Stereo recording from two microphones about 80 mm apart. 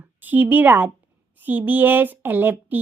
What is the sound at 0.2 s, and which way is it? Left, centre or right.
Speech, right.